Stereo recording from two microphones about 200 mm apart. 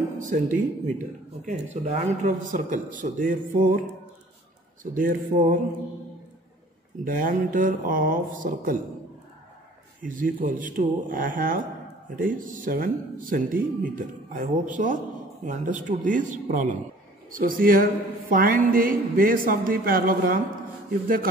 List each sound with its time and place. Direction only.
0.2 s speech: 40° right (ahead or behind)
4.9 s speech: 40° right (ahead or behind)
7.1 s speech: 45° right (ahead or behind)
10.0 s speech: 40° right (ahead or behind)